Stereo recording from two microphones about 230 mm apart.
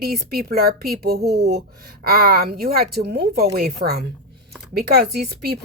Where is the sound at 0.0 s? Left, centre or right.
Right.